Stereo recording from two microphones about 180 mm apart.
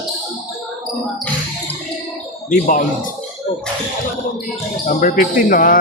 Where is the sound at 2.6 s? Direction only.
50° left (ahead or behind).